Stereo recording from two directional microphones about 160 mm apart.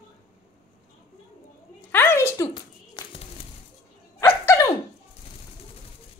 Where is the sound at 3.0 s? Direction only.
25° left (ahead or behind).